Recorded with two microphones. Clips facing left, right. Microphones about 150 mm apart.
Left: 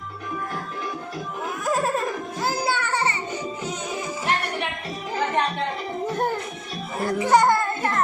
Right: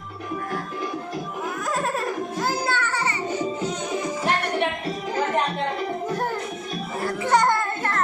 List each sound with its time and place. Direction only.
1.6 s music: 10° left (ahead or behind)
2.9 s music: 25° left (ahead or behind)
7.2 s a sound: 10° left (ahead or behind)
7.8 s music: 15° left (ahead or behind)